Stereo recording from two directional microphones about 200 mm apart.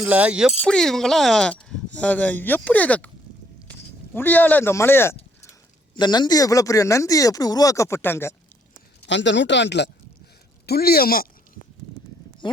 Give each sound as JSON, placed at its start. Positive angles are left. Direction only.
{"t": 0.0, "sound": "speech", "side_deg": -5}
{"t": 9.0, "sound": "speech", "side_deg": 65}